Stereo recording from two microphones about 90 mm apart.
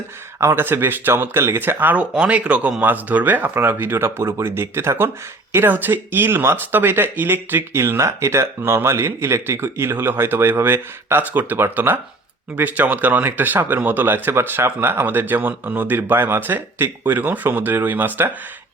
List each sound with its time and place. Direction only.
0.3 s speech: 30° right (ahead or behind)
2.1 s speech: 10° right (ahead or behind)
2.8 s speech: 20° right (ahead or behind)